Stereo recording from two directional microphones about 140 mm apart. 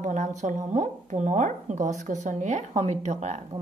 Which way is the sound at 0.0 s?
60° right (ahead or behind).